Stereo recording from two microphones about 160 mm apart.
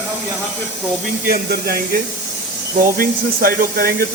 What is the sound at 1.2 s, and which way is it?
Speech, 70° right (ahead or behind).